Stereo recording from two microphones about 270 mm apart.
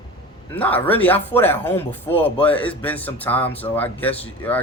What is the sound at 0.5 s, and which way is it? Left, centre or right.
Speech, centre.